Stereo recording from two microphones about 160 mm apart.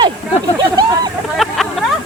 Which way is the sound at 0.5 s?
25° right (ahead or behind).